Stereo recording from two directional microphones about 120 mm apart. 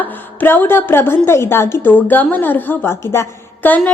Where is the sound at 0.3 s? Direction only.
15° left (ahead or behind).